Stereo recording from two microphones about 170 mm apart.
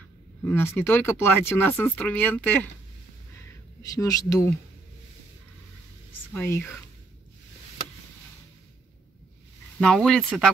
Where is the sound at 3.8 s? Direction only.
20° left (ahead or behind).